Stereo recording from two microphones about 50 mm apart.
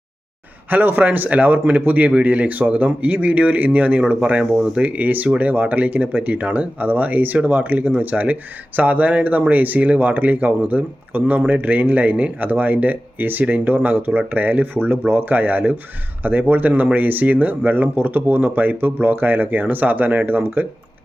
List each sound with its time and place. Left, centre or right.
0.7 s speech: right